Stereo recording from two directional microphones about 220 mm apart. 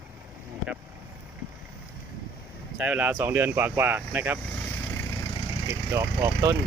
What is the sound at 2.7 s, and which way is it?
Speech, 5° right (ahead or behind).